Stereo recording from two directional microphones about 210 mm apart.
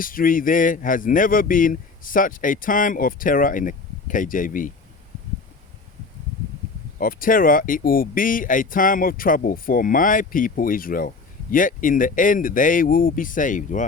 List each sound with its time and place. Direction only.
0.0 s speech: 40° left (ahead or behind)
7.0 s speech: 40° left (ahead or behind)